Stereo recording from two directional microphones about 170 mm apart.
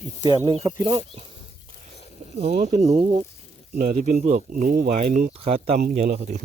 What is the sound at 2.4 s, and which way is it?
Speech, 40° right (ahead or behind).